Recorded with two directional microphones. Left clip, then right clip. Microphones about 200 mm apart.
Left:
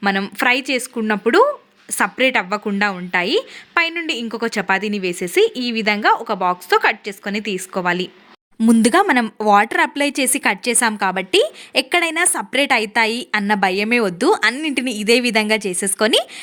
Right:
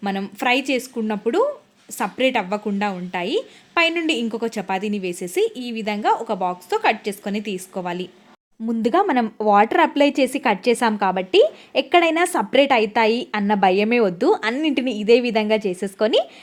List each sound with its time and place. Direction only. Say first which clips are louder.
0.0 s a woman's voice: left 6 dB; 5° left (ahead or behind)
8.6 s speech: left 5 dB; 25° left (ahead or behind)